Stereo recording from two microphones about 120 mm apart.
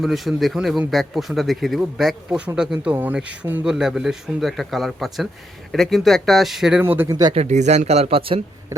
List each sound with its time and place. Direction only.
0.0 s a man's voice: centre (ahead or behind)
6.8 s speech: 20° right (ahead or behind)
7.3 s speech: 75° right (ahead or behind); by 8.4 s 50° right (ahead or behind)